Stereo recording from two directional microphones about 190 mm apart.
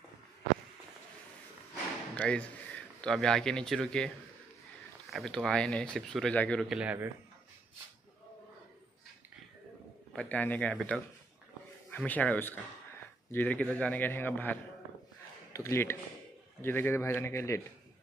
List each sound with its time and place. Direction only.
2.1 s speech: 5° left (ahead or behind)
5.1 s speech: centre (ahead or behind)
10.1 s a man's voice: 10° left (ahead or behind)